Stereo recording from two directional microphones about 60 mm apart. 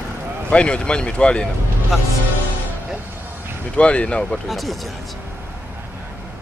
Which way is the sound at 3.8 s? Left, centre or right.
Centre.